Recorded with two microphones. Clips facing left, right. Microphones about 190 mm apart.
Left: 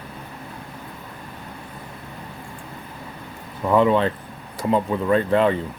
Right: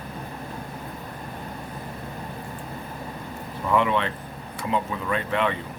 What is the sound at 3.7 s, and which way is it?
Speech, 35° left (ahead or behind).